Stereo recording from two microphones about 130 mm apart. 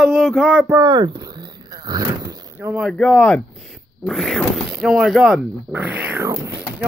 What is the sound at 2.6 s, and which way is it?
Speech, 15° right (ahead or behind).